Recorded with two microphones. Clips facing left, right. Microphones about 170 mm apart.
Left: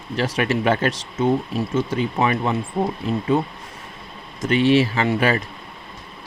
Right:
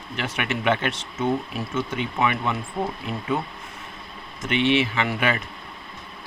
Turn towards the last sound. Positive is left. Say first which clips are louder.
# left 5 dB
turn(degrees=35)  # may be behind; listen again after turning